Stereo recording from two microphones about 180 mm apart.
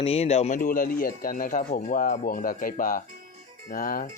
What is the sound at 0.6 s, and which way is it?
Speech, 50° left (ahead or behind).